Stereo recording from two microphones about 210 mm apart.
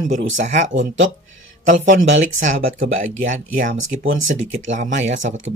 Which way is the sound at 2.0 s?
65° right (ahead or behind).